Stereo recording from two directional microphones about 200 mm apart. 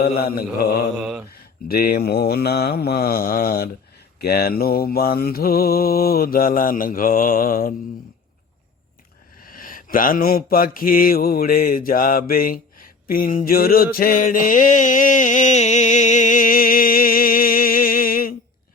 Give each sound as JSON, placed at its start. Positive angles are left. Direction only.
{"t": 0.0, "sound": "mantra", "side_deg": 50}
{"t": 0.9, "sound": "mantra", "side_deg": -5}
{"t": 1.3, "sound": "mantra", "side_deg": 50}
{"t": 9.4, "sound": "mantra", "side_deg": 45}